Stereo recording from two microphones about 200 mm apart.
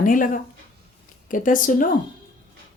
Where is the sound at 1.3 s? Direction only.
40° left (ahead or behind).